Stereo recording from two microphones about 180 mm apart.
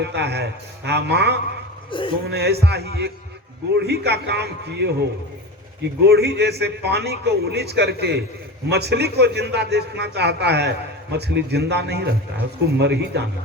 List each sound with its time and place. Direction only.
0.0 s a man's voice: 70° right (ahead or behind)
1.9 s speech: 30° left (ahead or behind)
2.2 s a man's voice: 65° right (ahead or behind)